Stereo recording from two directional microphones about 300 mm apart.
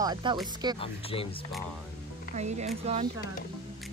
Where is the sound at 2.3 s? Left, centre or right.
Right.